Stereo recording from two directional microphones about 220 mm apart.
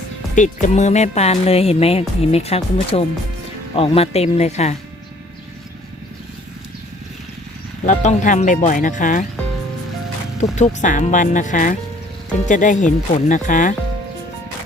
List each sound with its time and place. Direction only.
0.3 s speech: 35° left (ahead or behind)
7.9 s speech: 35° left (ahead or behind)
10.5 s speech: 30° left (ahead or behind)